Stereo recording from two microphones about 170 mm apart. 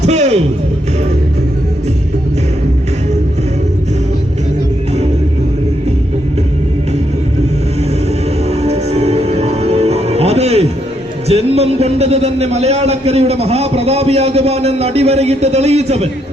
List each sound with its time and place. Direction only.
0.0 s music: 40° right (ahead or behind)
8.4 s music: 40° right (ahead or behind)
11.3 s a man's voice: 35° right (ahead or behind)